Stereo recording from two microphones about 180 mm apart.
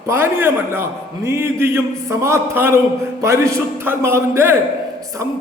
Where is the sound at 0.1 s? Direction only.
10° right (ahead or behind).